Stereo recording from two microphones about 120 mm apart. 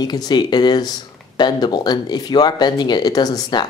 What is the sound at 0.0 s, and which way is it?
Speech, 35° left (ahead or behind).